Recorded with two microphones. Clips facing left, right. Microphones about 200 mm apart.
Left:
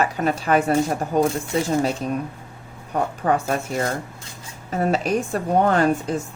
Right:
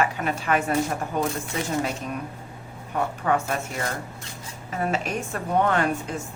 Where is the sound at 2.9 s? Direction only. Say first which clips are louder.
Left 3 dB; 35° left (ahead or behind).